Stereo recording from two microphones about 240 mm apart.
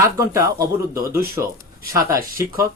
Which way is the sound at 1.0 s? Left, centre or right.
Right.